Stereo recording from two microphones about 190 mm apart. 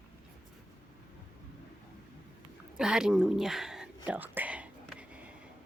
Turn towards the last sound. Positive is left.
turn(degrees=-5)  # may be behind; listen again after turning